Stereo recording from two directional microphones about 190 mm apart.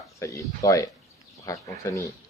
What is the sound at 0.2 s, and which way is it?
Speech, 15° left (ahead or behind).